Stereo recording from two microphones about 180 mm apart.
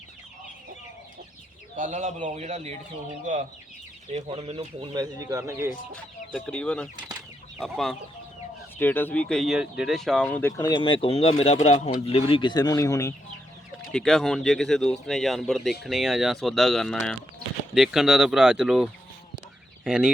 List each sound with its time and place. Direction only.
1.7 s a man's voice: 45° right (ahead or behind)
4.1 s speech: 35° right (ahead or behind); by 5.7 s 15° right (ahead or behind)
5.9 s speech: 5° left (ahead or behind)
10.6 s speech: 25° left (ahead or behind)
13.9 s speech: centre (ahead or behind)